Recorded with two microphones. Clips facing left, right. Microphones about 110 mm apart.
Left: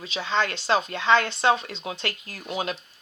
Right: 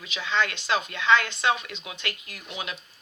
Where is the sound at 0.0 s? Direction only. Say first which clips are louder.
Left 2 dB; 35° left (ahead or behind).